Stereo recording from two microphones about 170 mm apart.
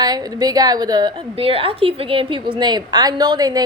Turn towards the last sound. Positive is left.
turn(degrees=-25)  # may be behind; listen again after turning